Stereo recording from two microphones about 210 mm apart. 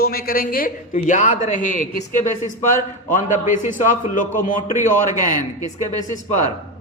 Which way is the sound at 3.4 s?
35° left (ahead or behind).